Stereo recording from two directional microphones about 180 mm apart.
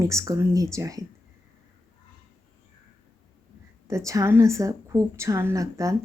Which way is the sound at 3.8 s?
15° right (ahead or behind).